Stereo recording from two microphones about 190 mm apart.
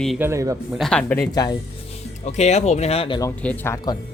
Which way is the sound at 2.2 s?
35° left (ahead or behind).